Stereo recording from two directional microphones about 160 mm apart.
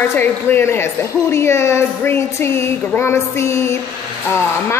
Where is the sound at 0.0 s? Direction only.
10° left (ahead or behind).